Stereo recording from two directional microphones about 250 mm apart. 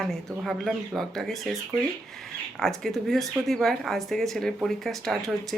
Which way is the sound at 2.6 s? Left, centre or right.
Centre.